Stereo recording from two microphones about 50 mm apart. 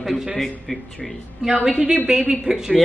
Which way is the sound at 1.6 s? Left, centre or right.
Centre.